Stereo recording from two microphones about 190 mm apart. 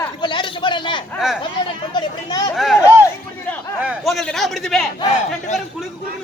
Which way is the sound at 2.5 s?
Centre (ahead or behind).